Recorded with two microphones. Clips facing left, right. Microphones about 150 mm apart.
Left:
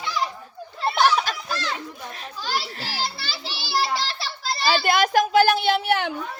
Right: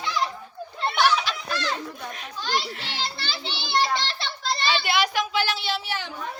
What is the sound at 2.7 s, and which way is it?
Speech, 40° left (ahead or behind).